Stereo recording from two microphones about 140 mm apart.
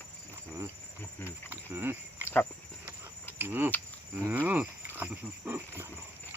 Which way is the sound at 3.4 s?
15° right (ahead or behind).